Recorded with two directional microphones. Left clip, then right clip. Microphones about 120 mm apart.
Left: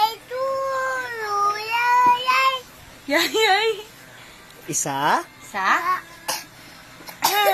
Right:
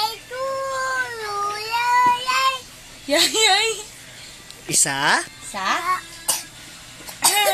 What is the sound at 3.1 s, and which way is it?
Speech, 50° right (ahead or behind).